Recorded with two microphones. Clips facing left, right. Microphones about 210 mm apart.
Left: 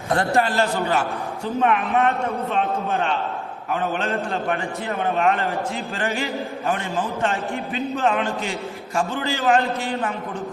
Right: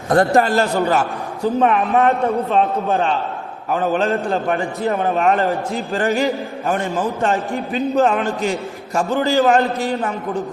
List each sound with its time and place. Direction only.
0.1 s a man's voice: 45° right (ahead or behind)